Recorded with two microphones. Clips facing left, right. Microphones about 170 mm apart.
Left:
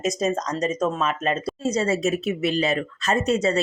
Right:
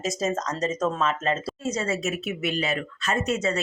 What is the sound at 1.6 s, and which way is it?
Speech, 35° left (ahead or behind).